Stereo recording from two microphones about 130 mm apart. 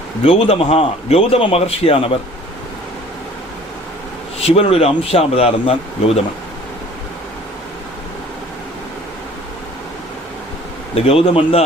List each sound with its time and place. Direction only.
0.3 s a man's voice: 50° left (ahead or behind)
4.4 s a man's voice: 50° left (ahead or behind)
10.9 s a man's voice: 45° left (ahead or behind)